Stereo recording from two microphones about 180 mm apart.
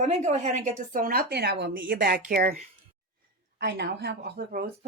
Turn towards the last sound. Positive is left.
turn(degrees=-60)  # may be behind; listen again after turning